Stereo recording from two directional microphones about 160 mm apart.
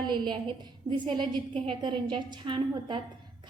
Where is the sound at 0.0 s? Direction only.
30° right (ahead or behind).